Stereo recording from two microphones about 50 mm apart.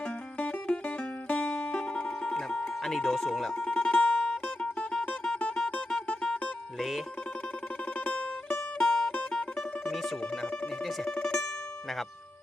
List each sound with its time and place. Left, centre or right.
0.3 s music: left
2.8 s music: centre
6.7 s music: centre
7.9 s music: left
8.8 s music: centre
9.9 s music: centre
11.0 s music: centre